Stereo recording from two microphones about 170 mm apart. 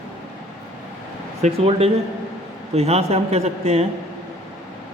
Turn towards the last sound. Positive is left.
turn(degrees=-40)  # may be behind; listen again after turning